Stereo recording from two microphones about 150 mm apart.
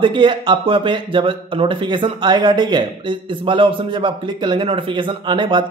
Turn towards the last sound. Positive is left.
turn(degrees=-30)  # may be behind; listen again after turning